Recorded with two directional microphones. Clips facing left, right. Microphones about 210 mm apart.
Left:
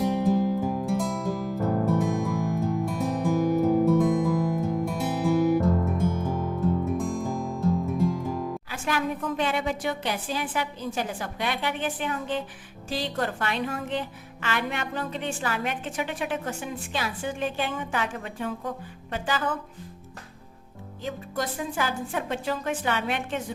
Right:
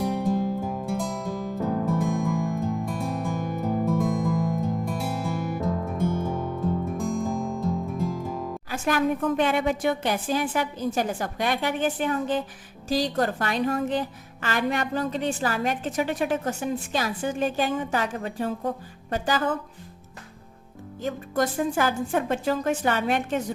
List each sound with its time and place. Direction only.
0.0 s music: 5° left (ahead or behind)
8.7 s a woman's voice: 50° right (ahead or behind)
21.0 s a woman's voice: 45° right (ahead or behind)